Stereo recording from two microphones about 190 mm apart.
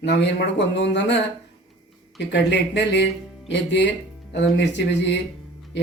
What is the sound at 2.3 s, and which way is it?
Speech, 65° left (ahead or behind).